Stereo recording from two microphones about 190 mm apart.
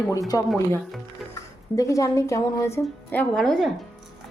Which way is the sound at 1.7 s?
15° left (ahead or behind).